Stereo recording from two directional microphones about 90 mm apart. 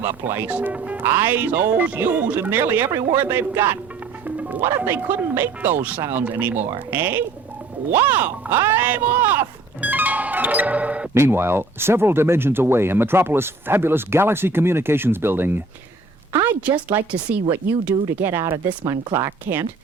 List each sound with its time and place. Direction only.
0.0 s speech: 25° right (ahead or behind)
4.4 s music: 20° right (ahead or behind)
4.8 s speech: 20° right (ahead or behind)
11.1 s a woman's voice: 25° right (ahead or behind)